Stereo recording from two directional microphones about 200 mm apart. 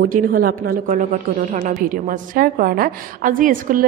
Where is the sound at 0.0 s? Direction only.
45° right (ahead or behind).